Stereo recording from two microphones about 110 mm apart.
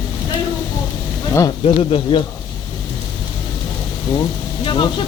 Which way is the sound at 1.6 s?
55° left (ahead or behind).